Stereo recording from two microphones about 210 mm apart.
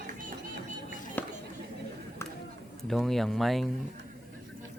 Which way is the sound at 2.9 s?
Centre (ahead or behind).